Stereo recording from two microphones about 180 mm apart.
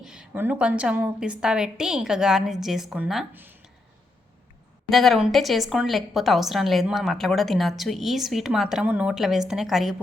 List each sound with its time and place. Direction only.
0.0 s a woman's voice: 5° right (ahead or behind)
4.9 s a woman's voice: centre (ahead or behind)